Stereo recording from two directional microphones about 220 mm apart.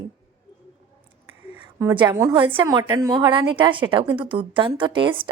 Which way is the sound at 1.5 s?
10° right (ahead or behind).